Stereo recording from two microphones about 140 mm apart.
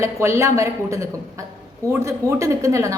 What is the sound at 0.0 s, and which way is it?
A woman's voice, 20° right (ahead or behind).